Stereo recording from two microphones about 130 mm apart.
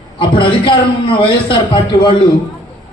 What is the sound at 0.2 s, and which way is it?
A man's voice, 40° left (ahead or behind).